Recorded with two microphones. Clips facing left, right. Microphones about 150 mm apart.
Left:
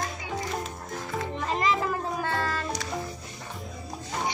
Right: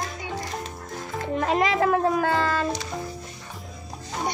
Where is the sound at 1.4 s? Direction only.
75° right (ahead or behind).